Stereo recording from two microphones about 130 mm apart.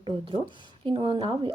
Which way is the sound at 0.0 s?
40° right (ahead or behind).